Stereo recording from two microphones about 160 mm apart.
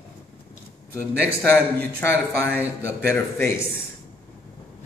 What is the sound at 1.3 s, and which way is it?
Speech, 15° left (ahead or behind).